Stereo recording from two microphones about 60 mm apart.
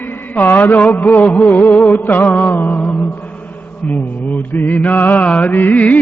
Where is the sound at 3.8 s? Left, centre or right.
Left.